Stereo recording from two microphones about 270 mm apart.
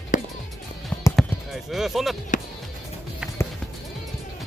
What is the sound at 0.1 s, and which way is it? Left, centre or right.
Music, left.